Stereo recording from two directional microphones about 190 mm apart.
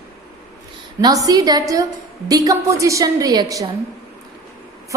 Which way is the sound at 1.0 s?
20° right (ahead or behind).